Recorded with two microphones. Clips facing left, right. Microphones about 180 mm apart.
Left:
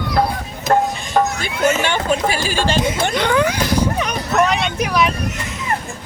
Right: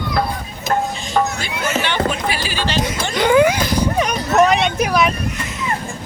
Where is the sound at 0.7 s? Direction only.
45° left (ahead or behind).